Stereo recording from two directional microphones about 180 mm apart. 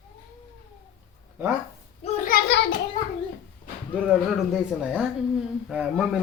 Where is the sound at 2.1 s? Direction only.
50° left (ahead or behind).